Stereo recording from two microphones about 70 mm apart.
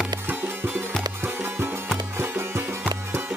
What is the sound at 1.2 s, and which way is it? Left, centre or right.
Music, right.